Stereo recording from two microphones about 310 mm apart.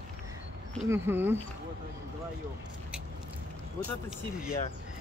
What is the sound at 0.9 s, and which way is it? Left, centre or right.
Speech, centre.